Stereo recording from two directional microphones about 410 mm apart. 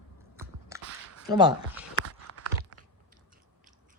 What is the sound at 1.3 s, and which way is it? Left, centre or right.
Female singing, centre.